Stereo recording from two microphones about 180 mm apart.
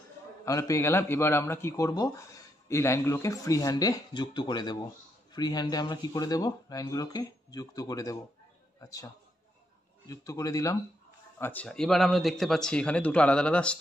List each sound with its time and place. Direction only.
0.5 s a man's voice: 15° left (ahead or behind)